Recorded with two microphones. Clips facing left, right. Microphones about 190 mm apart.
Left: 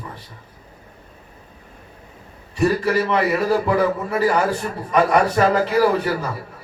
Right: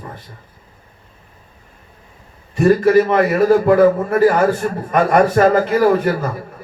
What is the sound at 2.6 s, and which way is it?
Speech, 50° right (ahead or behind).